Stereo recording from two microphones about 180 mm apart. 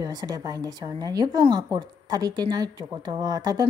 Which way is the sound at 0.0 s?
20° right (ahead or behind).